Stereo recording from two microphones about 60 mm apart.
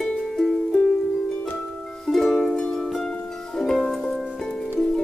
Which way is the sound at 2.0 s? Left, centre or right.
Centre.